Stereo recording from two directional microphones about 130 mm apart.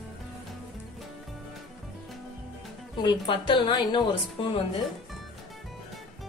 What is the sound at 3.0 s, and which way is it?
A woman's voice, 35° left (ahead or behind).